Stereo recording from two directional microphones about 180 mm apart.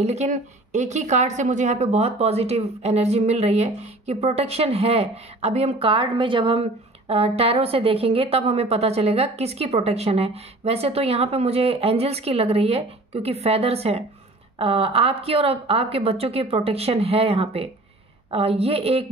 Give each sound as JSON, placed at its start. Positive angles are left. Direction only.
{"t": 0.0, "sound": "a woman's voice", "side_deg": -40}